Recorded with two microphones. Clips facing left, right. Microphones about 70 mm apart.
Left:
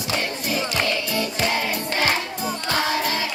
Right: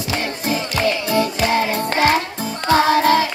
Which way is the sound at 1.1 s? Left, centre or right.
Right.